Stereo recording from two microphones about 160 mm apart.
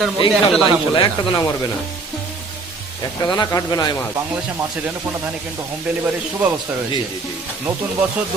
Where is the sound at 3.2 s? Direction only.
25° left (ahead or behind).